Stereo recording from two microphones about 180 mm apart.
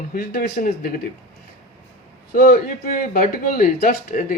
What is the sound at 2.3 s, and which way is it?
A man's voice, 55° left (ahead or behind).